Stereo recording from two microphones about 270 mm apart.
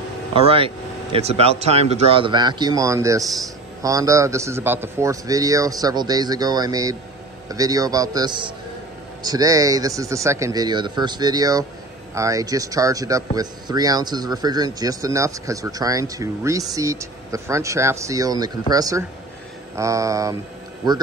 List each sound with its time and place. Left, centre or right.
0.3 s speech: right